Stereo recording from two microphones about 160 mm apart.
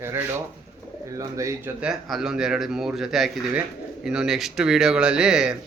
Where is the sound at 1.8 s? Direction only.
Centre (ahead or behind).